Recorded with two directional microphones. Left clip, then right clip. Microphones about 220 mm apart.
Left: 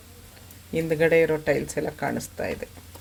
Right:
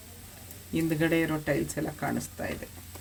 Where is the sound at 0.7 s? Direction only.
25° left (ahead or behind).